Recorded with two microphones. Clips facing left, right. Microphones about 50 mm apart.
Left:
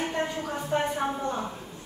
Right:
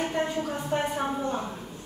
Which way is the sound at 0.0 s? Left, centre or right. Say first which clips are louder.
Right 2 dB; centre.